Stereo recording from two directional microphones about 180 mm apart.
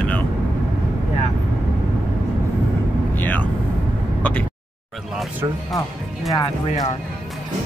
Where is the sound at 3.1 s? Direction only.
10° left (ahead or behind).